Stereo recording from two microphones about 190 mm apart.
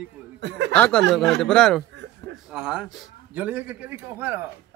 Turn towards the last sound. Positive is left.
turn(degrees=-10)  # may be behind; listen again after turning